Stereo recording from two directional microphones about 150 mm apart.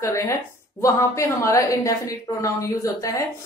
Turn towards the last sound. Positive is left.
turn(degrees=20)  # may be behind; listen again after turning